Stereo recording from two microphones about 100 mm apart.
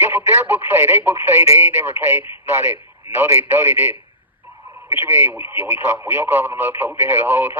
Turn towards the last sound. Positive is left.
turn(degrees=-25)  # may be behind; listen again after turning